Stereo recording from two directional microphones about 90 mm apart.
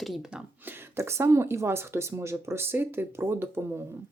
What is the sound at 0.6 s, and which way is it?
Speech, 25° right (ahead or behind).